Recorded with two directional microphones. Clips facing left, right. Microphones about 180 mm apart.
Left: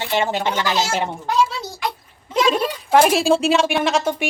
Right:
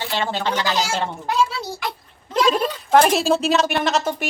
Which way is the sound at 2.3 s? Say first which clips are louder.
Even; centre (ahead or behind).